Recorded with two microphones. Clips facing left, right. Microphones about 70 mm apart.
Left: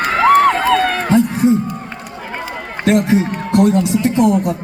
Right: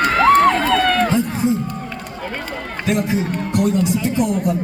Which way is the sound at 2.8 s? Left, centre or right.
Left.